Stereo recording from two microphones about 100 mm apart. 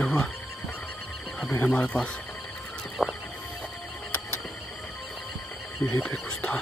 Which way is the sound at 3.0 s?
Centre (ahead or behind).